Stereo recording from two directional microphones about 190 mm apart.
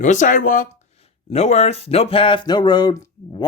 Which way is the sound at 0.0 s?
40° left (ahead or behind).